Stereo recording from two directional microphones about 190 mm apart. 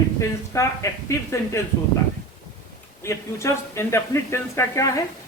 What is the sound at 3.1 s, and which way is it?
Speech, 15° left (ahead or behind).